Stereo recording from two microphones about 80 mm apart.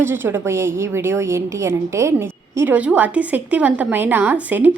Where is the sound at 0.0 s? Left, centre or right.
Right.